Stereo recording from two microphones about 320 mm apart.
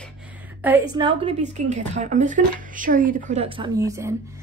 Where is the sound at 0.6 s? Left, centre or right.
Centre.